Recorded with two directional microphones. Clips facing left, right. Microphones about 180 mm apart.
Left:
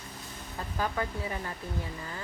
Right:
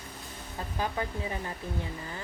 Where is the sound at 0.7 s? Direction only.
20° right (ahead or behind).